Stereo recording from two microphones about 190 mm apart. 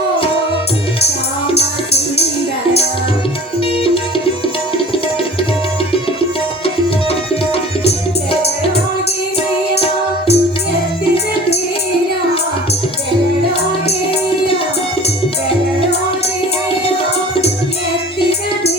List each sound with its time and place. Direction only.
1.5 s music: 35° left (ahead or behind)
9.7 s music: 35° left (ahead or behind)